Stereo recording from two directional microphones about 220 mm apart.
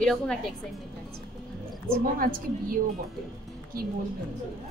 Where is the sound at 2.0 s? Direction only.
35° right (ahead or behind).